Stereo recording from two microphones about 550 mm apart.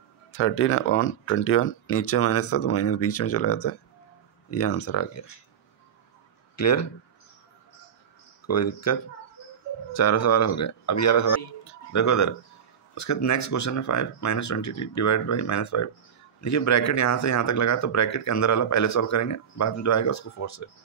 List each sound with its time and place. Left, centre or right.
0.3 s speech: left
6.5 s speech: left
8.5 s speech: left